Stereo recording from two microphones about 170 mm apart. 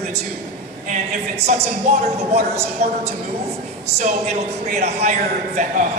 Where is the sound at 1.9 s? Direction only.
50° right (ahead or behind).